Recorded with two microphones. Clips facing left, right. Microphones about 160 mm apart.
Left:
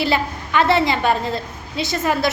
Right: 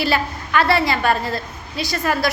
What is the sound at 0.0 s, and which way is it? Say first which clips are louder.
A woman's voice: left 1 dB; 20° left (ahead or behind).